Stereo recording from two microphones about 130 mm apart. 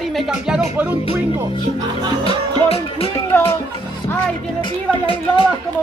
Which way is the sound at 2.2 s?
50° left (ahead or behind).